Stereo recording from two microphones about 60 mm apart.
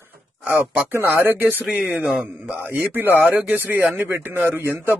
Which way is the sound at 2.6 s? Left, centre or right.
Right.